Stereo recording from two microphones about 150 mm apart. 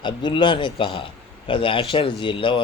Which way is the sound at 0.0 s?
30° left (ahead or behind).